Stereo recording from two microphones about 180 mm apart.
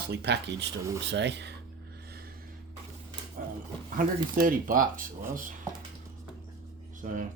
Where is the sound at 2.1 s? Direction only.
60° right (ahead or behind).